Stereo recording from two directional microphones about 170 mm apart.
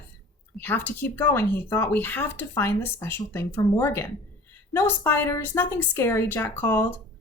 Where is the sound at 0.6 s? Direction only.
10° left (ahead or behind).